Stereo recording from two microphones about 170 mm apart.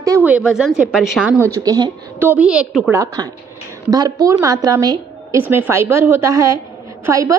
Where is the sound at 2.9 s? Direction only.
20° right (ahead or behind).